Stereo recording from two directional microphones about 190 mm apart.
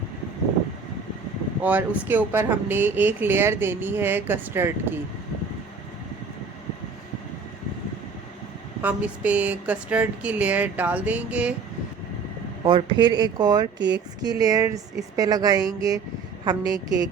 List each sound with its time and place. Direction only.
1.6 s speech: 10° right (ahead or behind)
8.8 s speech: 5° right (ahead or behind)
12.6 s a woman's voice: 25° right (ahead or behind)
13.7 s speech: 70° right (ahead or behind)
14.2 s a woman's voice: 20° right (ahead or behind)